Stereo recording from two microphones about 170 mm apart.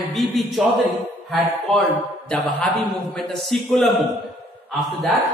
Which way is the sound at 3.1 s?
Centre (ahead or behind).